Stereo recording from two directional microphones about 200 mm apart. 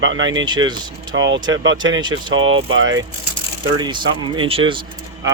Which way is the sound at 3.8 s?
25° right (ahead or behind).